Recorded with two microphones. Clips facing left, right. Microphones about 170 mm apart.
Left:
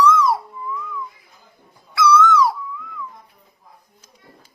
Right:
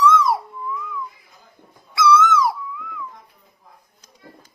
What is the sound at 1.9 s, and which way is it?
Owl, 25° right (ahead or behind).